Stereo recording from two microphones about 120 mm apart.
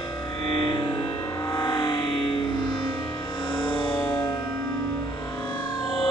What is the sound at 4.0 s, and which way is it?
Music, 20° left (ahead or behind).